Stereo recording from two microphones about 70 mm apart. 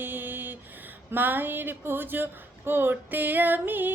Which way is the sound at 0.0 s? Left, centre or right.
Right.